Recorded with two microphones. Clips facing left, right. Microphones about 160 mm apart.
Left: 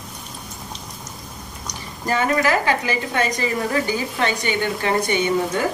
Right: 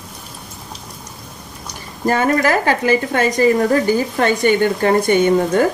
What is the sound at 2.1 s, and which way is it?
Speech, 45° right (ahead or behind).